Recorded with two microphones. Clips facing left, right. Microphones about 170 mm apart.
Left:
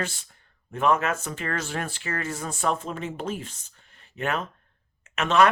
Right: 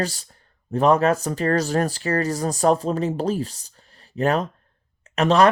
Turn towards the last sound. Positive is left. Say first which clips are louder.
# right 4 dB
turn(degrees=-35)  # may be behind; listen again after turning